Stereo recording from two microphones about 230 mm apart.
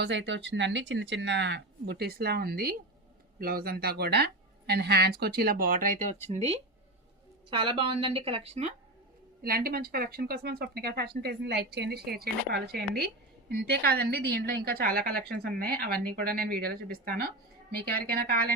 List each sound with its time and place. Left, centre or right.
0.0 s a woman's voice: right
9.4 s a woman's voice: right